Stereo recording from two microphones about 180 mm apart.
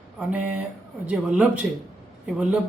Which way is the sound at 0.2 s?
5° right (ahead or behind).